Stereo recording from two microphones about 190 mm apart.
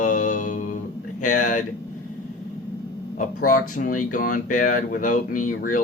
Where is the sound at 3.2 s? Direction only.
45° left (ahead or behind).